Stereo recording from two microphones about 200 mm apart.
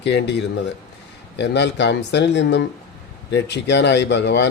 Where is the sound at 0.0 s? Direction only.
60° left (ahead or behind).